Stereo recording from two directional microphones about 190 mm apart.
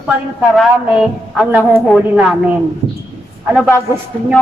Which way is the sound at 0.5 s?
Centre (ahead or behind).